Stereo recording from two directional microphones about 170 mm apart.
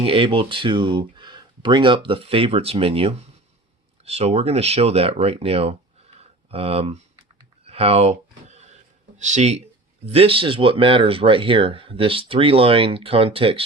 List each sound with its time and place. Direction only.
0.0 s speech: 30° right (ahead or behind)
6.1 s a sound: 35° right (ahead or behind)
10.1 s speech: 35° right (ahead or behind)